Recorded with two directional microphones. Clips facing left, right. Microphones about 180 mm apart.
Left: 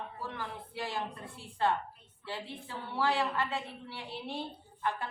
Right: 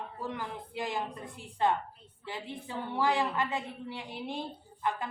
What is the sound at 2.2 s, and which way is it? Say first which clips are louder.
A woman's voice: right 1 dB; 15° right (ahead or behind).